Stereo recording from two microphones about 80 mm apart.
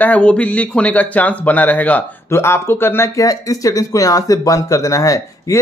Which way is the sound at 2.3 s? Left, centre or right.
Left.